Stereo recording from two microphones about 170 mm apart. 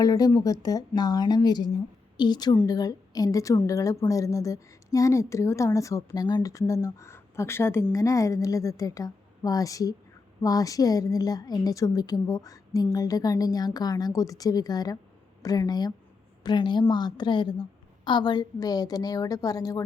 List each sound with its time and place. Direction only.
0.0 s a woman's voice: 20° left (ahead or behind)